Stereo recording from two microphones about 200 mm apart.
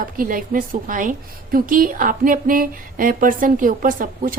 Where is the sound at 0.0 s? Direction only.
45° right (ahead or behind).